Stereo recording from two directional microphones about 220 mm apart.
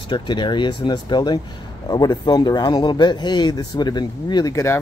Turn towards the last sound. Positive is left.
turn(degrees=15)  # may be behind; listen again after turning